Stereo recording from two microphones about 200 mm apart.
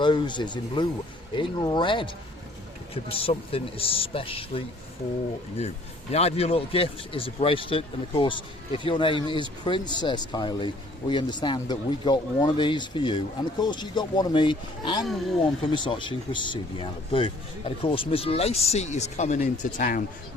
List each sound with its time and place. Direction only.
0.0 s a man's voice: 25° left (ahead or behind); by 20.1 s 40° left (ahead or behind)